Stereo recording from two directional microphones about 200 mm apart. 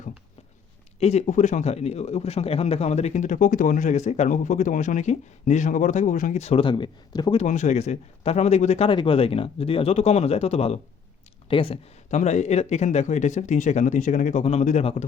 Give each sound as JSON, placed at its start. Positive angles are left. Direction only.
{"t": 0.9, "sound": "a man's voice", "side_deg": 35}
{"t": 7.3, "sound": "a man's voice", "side_deg": 40}